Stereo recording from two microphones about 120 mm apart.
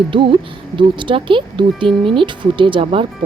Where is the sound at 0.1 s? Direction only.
45° right (ahead or behind).